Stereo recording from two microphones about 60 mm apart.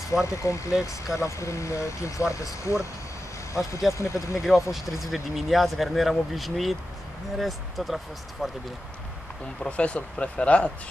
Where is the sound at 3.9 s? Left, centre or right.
Left.